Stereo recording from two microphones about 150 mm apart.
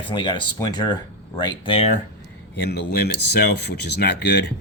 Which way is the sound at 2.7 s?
90° left.